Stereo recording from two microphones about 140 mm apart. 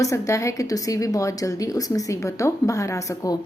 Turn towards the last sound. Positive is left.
turn(degrees=25)  # may be behind; listen again after turning